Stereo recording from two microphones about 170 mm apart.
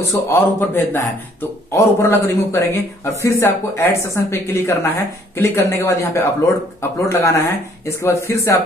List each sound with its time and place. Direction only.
0.1 s a man's voice: 10° left (ahead or behind)